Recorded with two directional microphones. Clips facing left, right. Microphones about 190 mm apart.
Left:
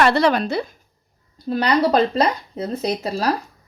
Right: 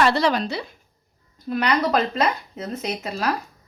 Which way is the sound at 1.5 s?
35° left (ahead or behind).